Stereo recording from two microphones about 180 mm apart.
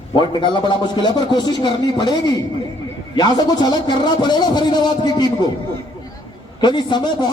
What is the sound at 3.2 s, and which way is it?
A man's voice, 25° left (ahead or behind).